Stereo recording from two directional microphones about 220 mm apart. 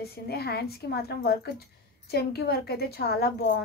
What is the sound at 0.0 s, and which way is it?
A woman's voice, 45° left (ahead or behind).